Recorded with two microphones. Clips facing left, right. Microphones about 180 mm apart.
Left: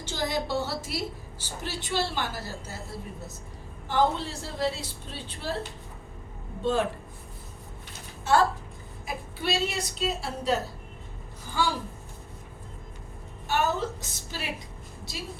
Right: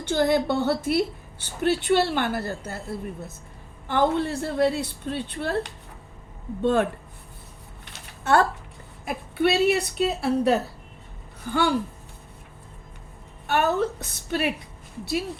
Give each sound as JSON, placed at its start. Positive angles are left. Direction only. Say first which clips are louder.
{"t": 0.0, "sound": "a woman's voice", "louder": "right 9 dB", "side_deg": -55}
{"t": 3.8, "sound": "a woman's voice", "louder": "right 3 dB", "side_deg": -55}
{"t": 7.9, "sound": "a sound", "louder": "right 2 dB", "side_deg": -60}
{"t": 9.0, "sound": "a woman's voice", "louder": "right 8 dB", "side_deg": -60}
{"t": 13.5, "sound": "a woman's voice", "louder": "right 5 dB", "side_deg": -60}